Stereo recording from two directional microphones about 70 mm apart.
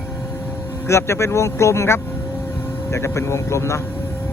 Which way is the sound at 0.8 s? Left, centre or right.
Left.